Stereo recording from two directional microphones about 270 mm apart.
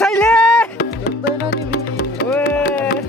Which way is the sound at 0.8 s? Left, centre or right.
Left.